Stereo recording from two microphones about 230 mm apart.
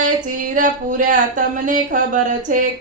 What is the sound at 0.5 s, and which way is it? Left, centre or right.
Speech, right.